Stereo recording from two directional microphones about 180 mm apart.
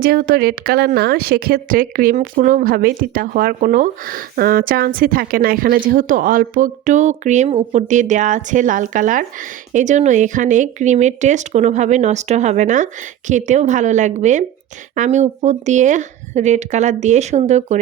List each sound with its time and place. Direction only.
0.0 s speech: 55° right (ahead or behind)